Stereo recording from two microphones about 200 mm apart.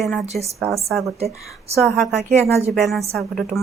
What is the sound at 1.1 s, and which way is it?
Speech, 30° right (ahead or behind).